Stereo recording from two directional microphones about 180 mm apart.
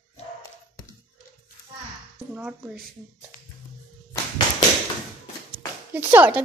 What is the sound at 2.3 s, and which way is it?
Speech, 5° right (ahead or behind).